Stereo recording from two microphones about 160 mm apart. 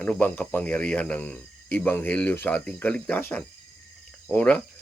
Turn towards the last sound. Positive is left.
turn(degrees=10)  # may be behind; listen again after turning